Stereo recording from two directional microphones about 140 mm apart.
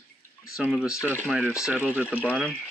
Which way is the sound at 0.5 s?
5° right (ahead or behind).